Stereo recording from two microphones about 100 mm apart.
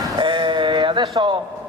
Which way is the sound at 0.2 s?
50° right (ahead or behind).